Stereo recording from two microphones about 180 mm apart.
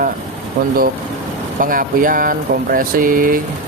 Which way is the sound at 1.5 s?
50° right (ahead or behind).